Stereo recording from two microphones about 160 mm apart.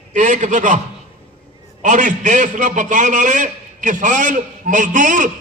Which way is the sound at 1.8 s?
50° right (ahead or behind).